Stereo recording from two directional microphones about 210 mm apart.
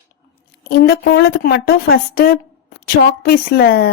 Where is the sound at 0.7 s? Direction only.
50° left (ahead or behind).